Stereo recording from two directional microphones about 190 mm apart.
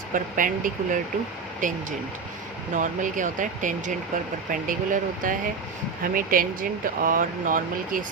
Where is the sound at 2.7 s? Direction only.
45° right (ahead or behind).